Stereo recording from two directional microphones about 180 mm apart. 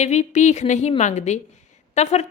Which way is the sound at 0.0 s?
40° left (ahead or behind).